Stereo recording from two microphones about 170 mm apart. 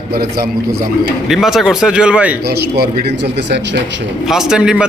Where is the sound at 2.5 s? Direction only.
70° right (ahead or behind).